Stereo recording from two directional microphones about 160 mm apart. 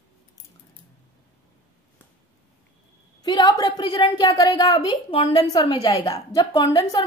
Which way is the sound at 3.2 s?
25° left (ahead or behind).